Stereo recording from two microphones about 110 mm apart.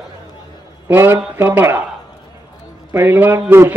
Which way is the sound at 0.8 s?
20° right (ahead or behind).